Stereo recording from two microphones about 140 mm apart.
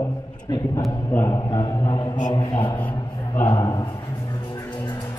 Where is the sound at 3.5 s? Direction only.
30° left (ahead or behind).